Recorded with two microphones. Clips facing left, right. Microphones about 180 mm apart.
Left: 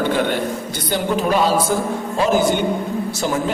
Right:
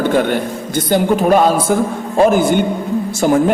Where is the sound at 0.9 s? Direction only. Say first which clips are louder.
Right 6 dB; 50° right (ahead or behind).